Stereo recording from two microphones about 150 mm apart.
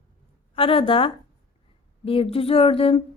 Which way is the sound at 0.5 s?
40° left (ahead or behind).